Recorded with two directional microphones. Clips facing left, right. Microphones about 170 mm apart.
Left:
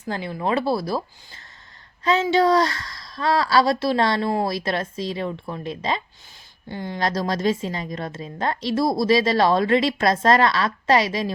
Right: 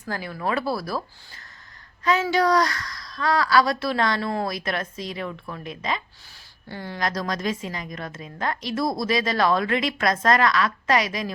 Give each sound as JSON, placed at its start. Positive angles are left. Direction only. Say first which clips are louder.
{"t": 0.0, "sound": "a woman's voice", "louder": "left 3 dB", "side_deg": 25}
{"t": 6.7, "sound": "speech", "louder": "left 4 dB", "side_deg": 20}
{"t": 7.0, "sound": "a woman's voice", "louder": "left 4 dB", "side_deg": 30}